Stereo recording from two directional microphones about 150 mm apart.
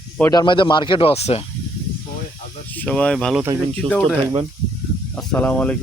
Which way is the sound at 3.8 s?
35° right (ahead or behind).